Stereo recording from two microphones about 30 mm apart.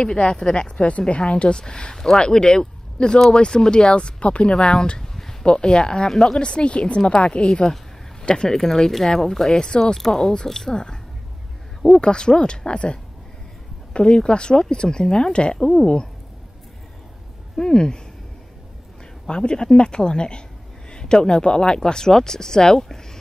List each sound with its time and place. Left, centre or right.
0.0 s speech: left
4.6 s speech: left
5.4 s speech: left
6.4 s speech: left
7.4 s speech: left
9.5 s speech: left
9.9 s speech: centre
12.0 s speech: left
17.6 s speech: left
19.2 s speech: left